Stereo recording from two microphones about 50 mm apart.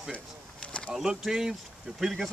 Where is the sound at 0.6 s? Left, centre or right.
Left.